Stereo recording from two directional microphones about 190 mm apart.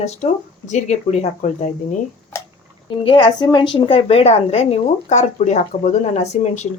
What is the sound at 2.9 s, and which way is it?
Speech, 25° left (ahead or behind).